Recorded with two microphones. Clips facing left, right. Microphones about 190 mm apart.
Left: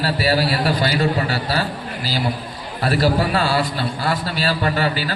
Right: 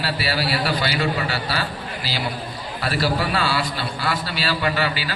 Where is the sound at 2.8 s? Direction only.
45° left (ahead or behind).